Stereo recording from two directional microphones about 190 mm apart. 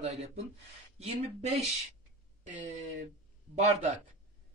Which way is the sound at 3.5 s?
35° right (ahead or behind).